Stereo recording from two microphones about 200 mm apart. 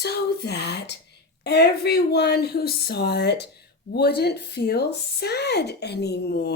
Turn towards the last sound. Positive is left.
turn(degrees=55)  # may be behind; listen again after turning